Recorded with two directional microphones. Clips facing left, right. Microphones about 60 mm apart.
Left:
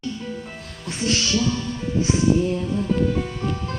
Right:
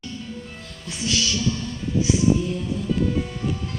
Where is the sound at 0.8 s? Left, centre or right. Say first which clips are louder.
Left 2 dB; left.